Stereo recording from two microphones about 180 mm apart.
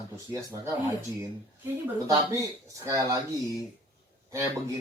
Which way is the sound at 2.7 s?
15° right (ahead or behind).